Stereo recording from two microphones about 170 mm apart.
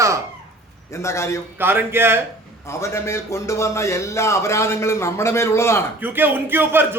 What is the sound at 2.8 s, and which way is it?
A man's voice, 15° left (ahead or behind).